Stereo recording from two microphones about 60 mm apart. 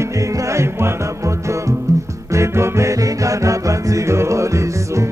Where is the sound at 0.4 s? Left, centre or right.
Right.